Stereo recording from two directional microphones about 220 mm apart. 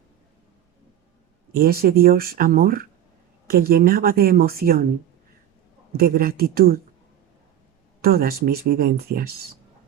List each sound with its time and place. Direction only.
1.5 s a woman's voice: 45° right (ahead or behind)
5.9 s a woman's voice: 45° right (ahead or behind)
8.0 s a woman's voice: 45° right (ahead or behind)